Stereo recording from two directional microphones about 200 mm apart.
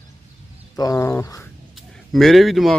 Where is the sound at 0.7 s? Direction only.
15° left (ahead or behind).